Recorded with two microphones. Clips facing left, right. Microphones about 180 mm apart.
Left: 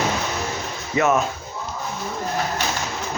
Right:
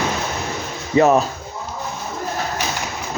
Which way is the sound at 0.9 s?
35° right (ahead or behind).